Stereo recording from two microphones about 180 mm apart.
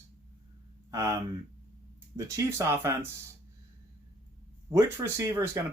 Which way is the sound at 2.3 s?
15° right (ahead or behind).